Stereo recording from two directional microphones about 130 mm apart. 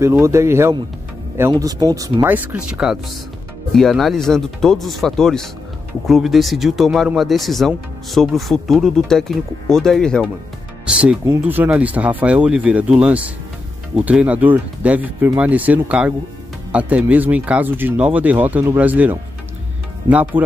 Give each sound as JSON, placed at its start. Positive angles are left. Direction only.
{"t": 0.0, "sound": "speech", "side_deg": -20}
{"t": 2.2, "sound": "speech", "side_deg": -15}
{"t": 10.9, "sound": "speech", "side_deg": -10}